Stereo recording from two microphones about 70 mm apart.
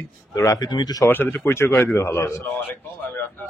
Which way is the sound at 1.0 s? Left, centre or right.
Left.